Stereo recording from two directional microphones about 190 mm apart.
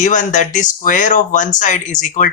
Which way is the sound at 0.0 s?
40° left (ahead or behind).